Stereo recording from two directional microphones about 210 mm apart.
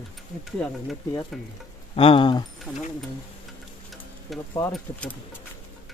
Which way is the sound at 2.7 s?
5° right (ahead or behind).